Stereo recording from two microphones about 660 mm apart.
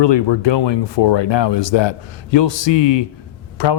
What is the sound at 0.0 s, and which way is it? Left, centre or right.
A man's voice, left.